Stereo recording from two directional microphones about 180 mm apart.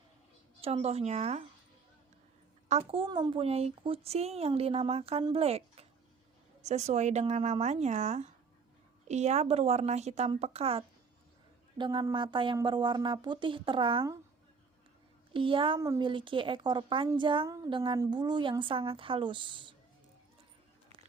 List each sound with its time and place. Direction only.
0.6 s a woman's voice: 35° right (ahead or behind)
2.6 s a woman's voice: 35° right (ahead or behind)
15.3 s speech: 30° right (ahead or behind)